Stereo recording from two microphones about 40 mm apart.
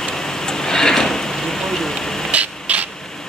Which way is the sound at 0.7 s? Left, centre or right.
Centre.